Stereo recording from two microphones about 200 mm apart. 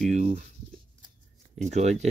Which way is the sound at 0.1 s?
35° right (ahead or behind).